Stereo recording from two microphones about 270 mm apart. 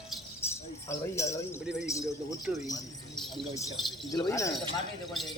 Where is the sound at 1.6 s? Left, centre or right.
Centre.